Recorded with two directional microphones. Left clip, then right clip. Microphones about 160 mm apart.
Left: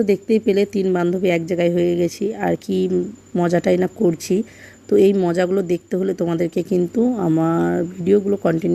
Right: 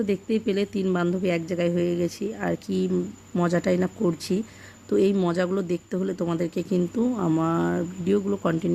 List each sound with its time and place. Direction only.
0.0 s speech: 20° left (ahead or behind)